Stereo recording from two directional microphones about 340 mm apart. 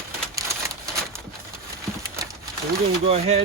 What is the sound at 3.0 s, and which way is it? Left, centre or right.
Speech, centre.